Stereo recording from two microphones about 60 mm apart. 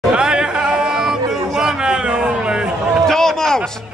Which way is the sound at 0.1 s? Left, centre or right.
Centre.